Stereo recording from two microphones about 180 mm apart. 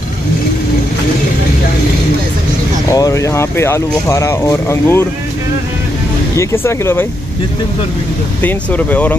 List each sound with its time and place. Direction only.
2.9 s speech: 20° left (ahead or behind)
6.3 s speech: 15° left (ahead or behind)
8.4 s speech: 10° left (ahead or behind)